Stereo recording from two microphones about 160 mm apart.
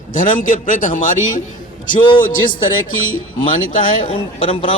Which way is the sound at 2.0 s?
30° left (ahead or behind).